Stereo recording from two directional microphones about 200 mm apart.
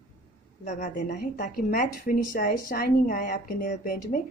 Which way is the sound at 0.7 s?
40° left (ahead or behind).